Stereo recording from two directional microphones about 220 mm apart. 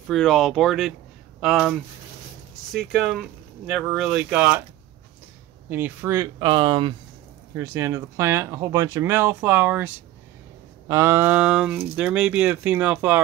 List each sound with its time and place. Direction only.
0.1 s speech: centre (ahead or behind)
2.9 s speech: centre (ahead or behind)
5.7 s speech: 10° right (ahead or behind)